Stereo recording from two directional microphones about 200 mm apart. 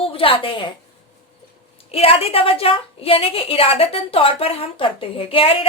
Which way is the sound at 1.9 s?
30° left (ahead or behind).